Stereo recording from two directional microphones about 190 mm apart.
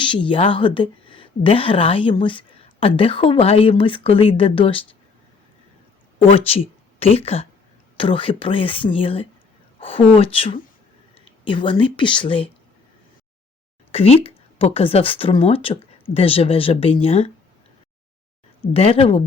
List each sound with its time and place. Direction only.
0.0 s a woman's voice: 25° left (ahead or behind)
6.2 s a woman's voice: 30° left (ahead or behind)
13.9 s speech: 30° left (ahead or behind)
18.6 s a woman's voice: 30° left (ahead or behind)